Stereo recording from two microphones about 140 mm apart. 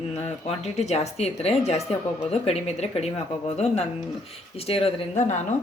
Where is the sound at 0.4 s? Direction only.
50° left (ahead or behind).